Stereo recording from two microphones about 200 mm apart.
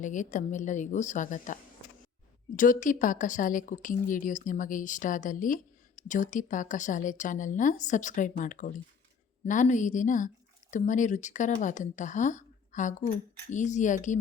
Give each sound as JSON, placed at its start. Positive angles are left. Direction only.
{"t": 0.0, "sound": "speech", "side_deg": 40}
{"t": 2.6, "sound": "speech", "side_deg": 40}